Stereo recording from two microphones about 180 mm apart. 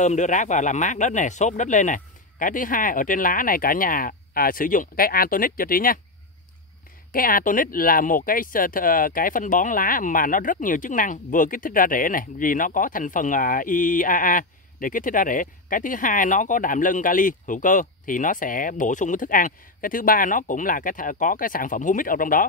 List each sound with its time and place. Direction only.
0.0 s speech: 40° left (ahead or behind)
7.1 s speech: 50° left (ahead or behind)